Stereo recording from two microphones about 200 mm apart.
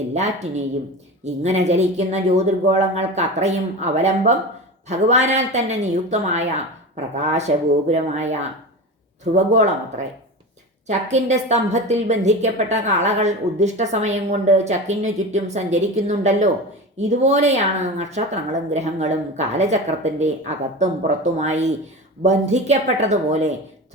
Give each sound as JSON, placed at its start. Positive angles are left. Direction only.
{"t": 0.1, "sound": "a woman's voice", "side_deg": -35}